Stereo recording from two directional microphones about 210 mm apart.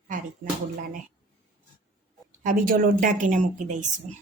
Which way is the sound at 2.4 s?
40° right (ahead or behind).